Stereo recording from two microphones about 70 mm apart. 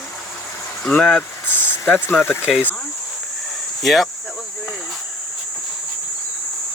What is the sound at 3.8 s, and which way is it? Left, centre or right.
Speech, centre.